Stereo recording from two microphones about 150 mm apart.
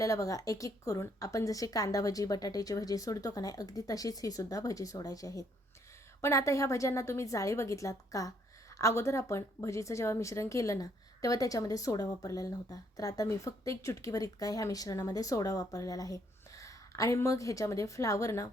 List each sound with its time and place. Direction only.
0.0 s a woman's voice: 20° left (ahead or behind)